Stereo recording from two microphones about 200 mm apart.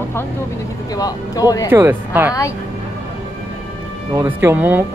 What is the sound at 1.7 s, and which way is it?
Speech, 10° right (ahead or behind).